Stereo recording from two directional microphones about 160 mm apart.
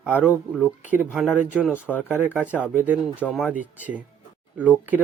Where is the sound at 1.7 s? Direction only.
10° left (ahead or behind).